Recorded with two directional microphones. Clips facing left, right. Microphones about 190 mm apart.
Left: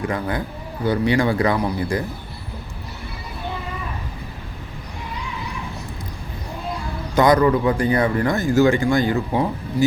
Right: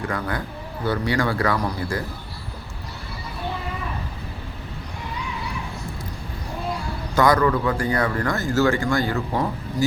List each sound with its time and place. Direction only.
0.1 s speech: 20° left (ahead or behind)
7.2 s speech: 20° left (ahead or behind)